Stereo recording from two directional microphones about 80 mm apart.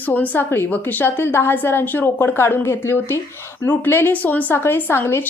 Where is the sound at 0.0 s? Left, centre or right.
Left.